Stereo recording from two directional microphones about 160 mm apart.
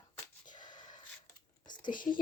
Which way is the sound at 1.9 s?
60° left (ahead or behind).